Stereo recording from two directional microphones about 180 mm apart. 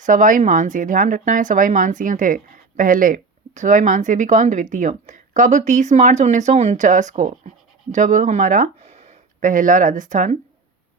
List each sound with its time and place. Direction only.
0.0 s a woman's voice: 45° right (ahead or behind)